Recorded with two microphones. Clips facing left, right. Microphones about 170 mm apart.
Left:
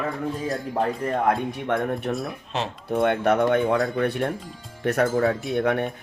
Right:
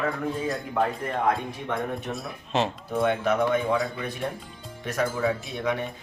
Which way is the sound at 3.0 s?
60° left (ahead or behind).